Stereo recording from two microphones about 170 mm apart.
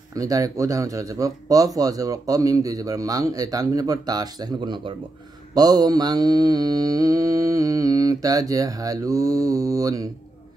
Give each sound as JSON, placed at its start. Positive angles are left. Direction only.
{"t": 0.1, "sound": "speech", "side_deg": -20}